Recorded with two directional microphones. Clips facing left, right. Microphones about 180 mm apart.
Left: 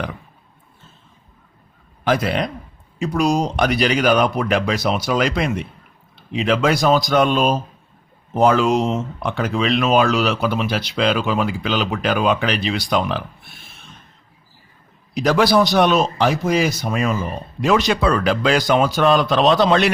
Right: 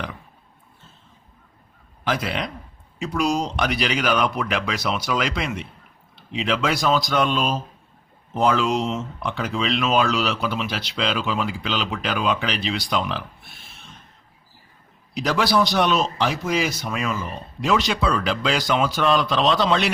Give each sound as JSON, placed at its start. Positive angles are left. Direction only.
{"t": 2.0, "sound": "speech", "side_deg": 45}
{"t": 15.1, "sound": "speech", "side_deg": 50}